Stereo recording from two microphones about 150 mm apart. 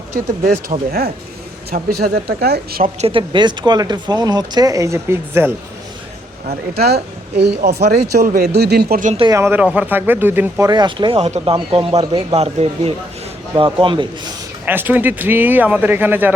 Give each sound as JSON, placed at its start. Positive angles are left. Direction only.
{"t": 0.9, "sound": "speech", "side_deg": -90}
{"t": 2.8, "sound": "speech", "side_deg": -40}
{"t": 6.7, "sound": "speech", "side_deg": -90}
{"t": 9.3, "sound": "speech", "side_deg": -15}
{"t": 10.7, "sound": "speech", "side_deg": -30}
{"t": 13.7, "sound": "speech", "side_deg": -35}
{"t": 14.6, "sound": "speech", "side_deg": -10}